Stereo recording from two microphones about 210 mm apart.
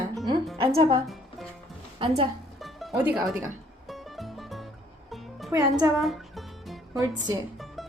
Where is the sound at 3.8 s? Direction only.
Centre (ahead or behind).